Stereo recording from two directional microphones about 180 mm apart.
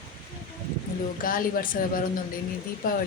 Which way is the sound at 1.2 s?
50° left (ahead or behind).